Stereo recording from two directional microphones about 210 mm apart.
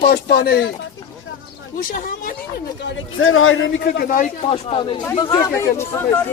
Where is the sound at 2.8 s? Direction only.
65° left (ahead or behind); by 4.3 s 45° left (ahead or behind).